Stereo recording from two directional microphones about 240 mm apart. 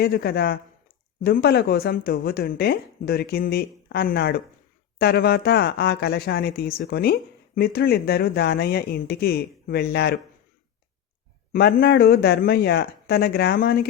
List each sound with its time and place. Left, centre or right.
0.0 s speech: left
11.5 s speech: left